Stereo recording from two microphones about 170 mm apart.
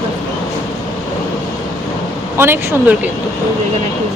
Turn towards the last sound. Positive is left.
turn(degrees=-10)  # may be behind; listen again after turning